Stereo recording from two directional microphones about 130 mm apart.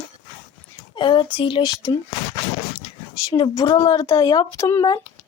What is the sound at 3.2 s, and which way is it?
A woman's voice, 30° left (ahead or behind).